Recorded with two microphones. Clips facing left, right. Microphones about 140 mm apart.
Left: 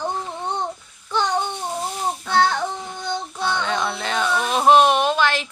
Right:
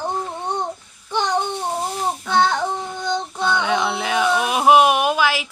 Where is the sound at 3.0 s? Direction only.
20° right (ahead or behind).